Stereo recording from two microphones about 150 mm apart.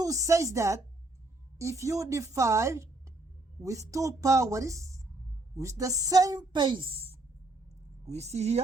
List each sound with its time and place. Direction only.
0.0 s a woman's voice: 20° right (ahead or behind); by 8.6 s 45° right (ahead or behind)